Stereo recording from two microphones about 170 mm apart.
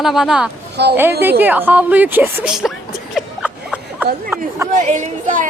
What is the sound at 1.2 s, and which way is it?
A woman's voice, 10° right (ahead or behind).